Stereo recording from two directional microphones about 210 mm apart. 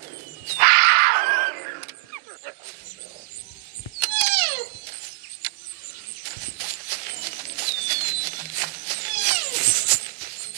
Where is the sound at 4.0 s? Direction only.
45° right (ahead or behind).